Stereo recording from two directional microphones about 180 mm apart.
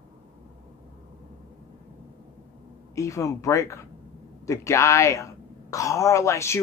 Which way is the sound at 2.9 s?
15° left (ahead or behind).